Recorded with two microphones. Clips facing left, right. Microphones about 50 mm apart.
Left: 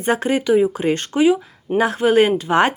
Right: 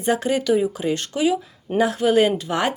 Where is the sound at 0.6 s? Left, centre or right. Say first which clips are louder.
Left 4 dB; left.